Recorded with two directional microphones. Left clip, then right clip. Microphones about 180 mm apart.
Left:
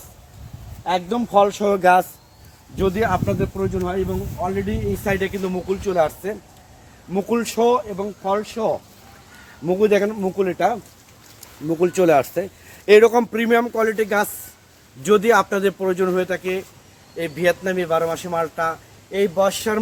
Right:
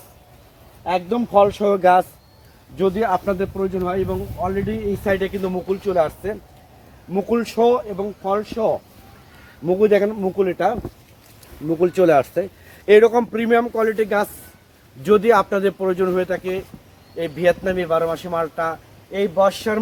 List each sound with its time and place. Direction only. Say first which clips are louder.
0.9 s speech: right 1 dB; 10° left (ahead or behind)
2.7 s a man's voice: right 1 dB; 25° left (ahead or behind); by 4.5 s 10° left (ahead or behind)
5.0 s a man's voice: right 2 dB; 20° left (ahead or behind)
11.8 s a man's voice: right 1 dB; 20° left (ahead or behind)
15.0 s speech: right 1 dB; 10° left (ahead or behind)